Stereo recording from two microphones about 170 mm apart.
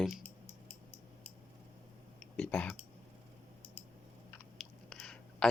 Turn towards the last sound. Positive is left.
turn(degrees=5)  # may be behind; listen again after turning